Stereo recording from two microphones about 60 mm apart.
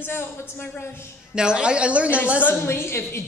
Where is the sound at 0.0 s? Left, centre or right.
Left.